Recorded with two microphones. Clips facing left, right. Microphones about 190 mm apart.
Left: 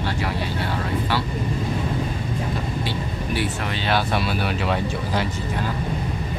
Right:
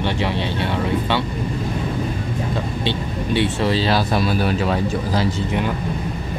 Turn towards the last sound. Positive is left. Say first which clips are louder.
# right 3 dB
turn(degrees=-40)  # may be behind; listen again after turning